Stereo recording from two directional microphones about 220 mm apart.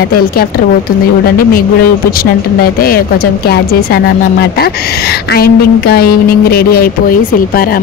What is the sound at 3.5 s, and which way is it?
A woman's voice, 45° left (ahead or behind).